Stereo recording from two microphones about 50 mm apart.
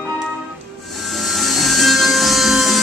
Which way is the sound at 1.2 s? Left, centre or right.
Centre.